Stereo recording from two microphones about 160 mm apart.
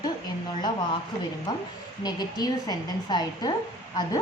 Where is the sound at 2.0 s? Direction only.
25° left (ahead or behind).